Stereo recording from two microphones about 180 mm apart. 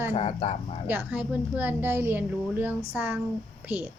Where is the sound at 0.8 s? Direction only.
10° right (ahead or behind).